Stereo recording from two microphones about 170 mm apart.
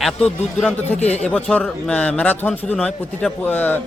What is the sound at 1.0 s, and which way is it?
Speech, 40° left (ahead or behind).